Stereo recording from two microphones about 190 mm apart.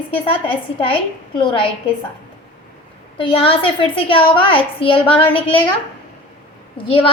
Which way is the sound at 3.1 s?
30° left (ahead or behind).